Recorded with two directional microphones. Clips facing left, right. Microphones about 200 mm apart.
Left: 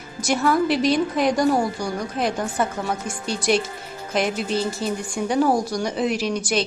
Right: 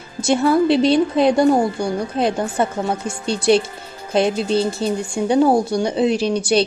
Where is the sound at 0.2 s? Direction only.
25° right (ahead or behind).